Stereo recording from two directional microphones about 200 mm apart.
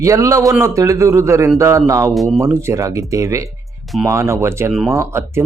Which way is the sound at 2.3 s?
15° right (ahead or behind).